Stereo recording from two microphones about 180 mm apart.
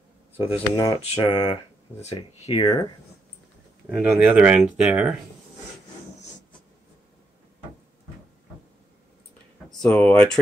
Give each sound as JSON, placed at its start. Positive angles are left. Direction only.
{"t": 0.4, "sound": "speech", "side_deg": 25}
{"t": 2.6, "sound": "speech", "side_deg": 20}
{"t": 3.9, "sound": "speech", "side_deg": -5}
{"t": 9.8, "sound": "speech", "side_deg": 10}